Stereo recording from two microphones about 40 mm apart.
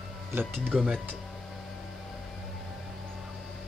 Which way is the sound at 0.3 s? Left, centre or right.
Right.